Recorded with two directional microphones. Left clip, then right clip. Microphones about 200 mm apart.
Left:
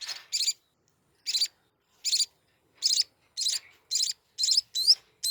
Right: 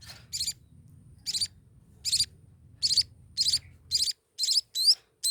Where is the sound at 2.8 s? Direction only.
25° right (ahead or behind).